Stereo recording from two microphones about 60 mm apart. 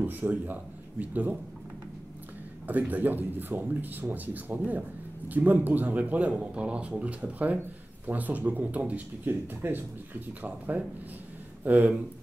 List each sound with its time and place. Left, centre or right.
0.0 s speech: right
2.6 s speech: right
9.3 s speech: right
11.6 s speech: right